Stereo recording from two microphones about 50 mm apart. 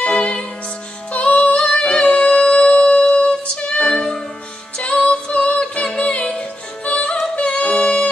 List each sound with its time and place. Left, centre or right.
0.0 s music: centre
3.8 s music: centre
4.7 s music: left
7.3 s yodeling: left